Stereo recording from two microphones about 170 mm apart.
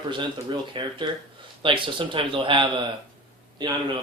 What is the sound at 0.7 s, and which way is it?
Speech, 30° right (ahead or behind).